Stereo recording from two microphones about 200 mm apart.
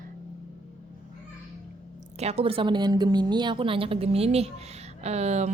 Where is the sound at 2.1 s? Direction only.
30° right (ahead or behind).